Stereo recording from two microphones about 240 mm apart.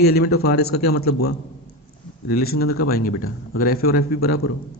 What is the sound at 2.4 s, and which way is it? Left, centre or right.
A man's voice, left.